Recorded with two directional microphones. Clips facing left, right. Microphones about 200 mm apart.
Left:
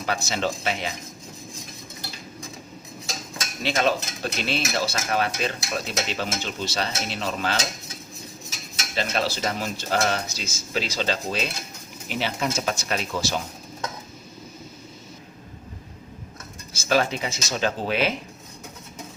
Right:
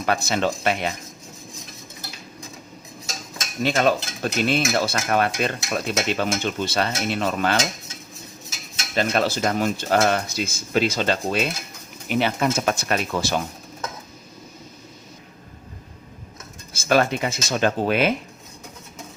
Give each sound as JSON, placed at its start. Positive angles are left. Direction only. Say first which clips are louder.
{"t": 0.0, "sound": "cutlery", "louder": "right 4 dB", "side_deg": -55}
{"t": 3.6, "sound": "cutlery", "louder": "right 3 dB", "side_deg": -45}
{"t": 9.0, "sound": "speech", "louder": "right 5 dB", "side_deg": -50}
{"t": 12.0, "sound": "cutlery", "louder": "right 6 dB", "side_deg": -55}
{"t": 16.7, "sound": "cutlery", "louder": "right 3 dB", "side_deg": -55}